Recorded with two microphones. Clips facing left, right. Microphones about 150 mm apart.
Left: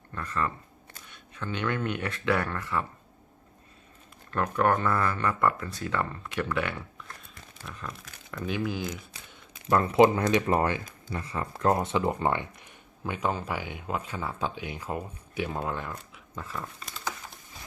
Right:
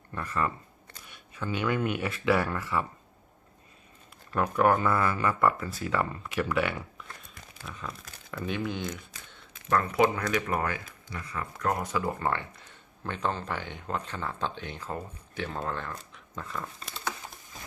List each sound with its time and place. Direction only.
0.1 s speech: 10° right (ahead or behind)
4.3 s speech: 5° right (ahead or behind)
9.7 s speech: 25° left (ahead or behind); by 16.6 s 5° left (ahead or behind)